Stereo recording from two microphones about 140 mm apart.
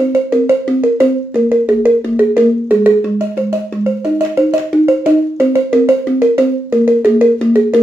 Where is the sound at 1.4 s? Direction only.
10° right (ahead or behind).